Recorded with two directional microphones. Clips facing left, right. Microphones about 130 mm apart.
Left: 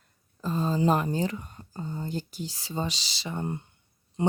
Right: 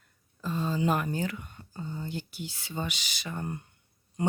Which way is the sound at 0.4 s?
35° left (ahead or behind).